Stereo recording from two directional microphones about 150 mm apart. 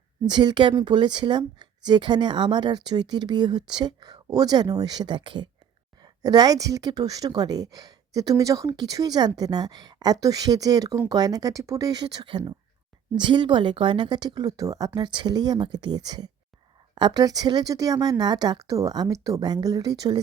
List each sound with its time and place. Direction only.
0.3 s speech: 30° right (ahead or behind)